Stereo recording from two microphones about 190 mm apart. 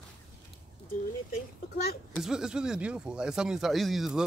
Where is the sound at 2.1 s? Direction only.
5° right (ahead or behind).